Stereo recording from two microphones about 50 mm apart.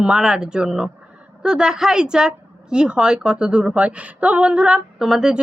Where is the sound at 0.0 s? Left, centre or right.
Centre.